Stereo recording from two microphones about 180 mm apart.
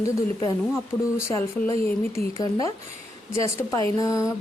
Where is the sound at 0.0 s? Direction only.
20° left (ahead or behind).